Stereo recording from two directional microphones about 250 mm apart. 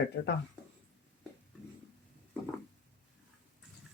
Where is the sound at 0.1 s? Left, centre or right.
Left.